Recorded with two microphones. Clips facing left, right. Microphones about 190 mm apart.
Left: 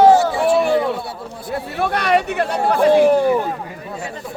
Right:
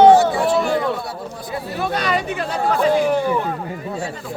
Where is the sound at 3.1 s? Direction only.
35° left (ahead or behind).